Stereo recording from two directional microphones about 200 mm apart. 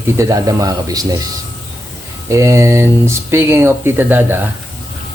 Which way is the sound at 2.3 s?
15° right (ahead or behind).